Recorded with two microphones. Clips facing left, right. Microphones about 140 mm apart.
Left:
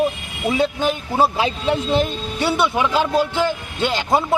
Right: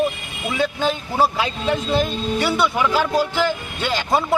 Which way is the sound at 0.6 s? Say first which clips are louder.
Right 1 dB; 20° left (ahead or behind).